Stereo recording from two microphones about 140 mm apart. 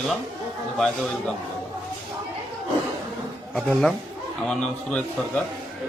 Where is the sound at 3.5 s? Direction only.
Centre (ahead or behind).